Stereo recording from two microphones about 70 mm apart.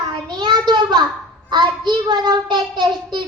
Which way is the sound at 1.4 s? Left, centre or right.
Right.